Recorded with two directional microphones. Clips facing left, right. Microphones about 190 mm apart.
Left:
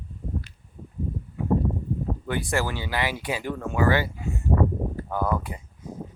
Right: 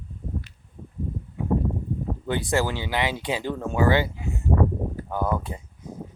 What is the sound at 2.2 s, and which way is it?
Speech, 20° right (ahead or behind).